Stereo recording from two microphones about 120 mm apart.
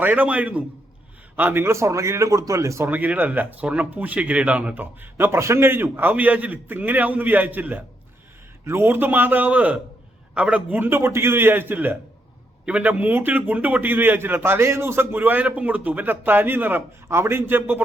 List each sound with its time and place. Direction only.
0.0 s speech: 15° right (ahead or behind)